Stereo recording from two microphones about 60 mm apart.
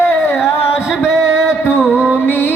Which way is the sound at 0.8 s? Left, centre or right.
Centre.